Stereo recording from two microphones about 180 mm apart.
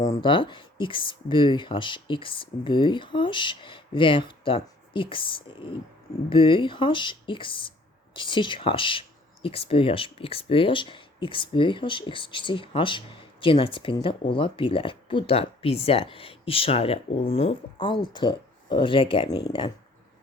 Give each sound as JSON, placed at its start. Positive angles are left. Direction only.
{"t": 0.0, "sound": "speech", "side_deg": 25}